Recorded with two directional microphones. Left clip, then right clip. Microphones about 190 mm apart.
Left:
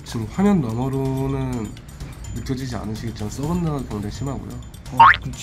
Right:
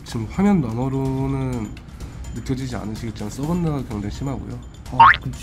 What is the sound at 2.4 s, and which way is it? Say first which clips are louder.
Speech: right 1 dB; 10° right (ahead or behind).